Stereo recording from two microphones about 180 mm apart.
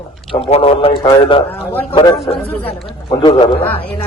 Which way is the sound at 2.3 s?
15° left (ahead or behind).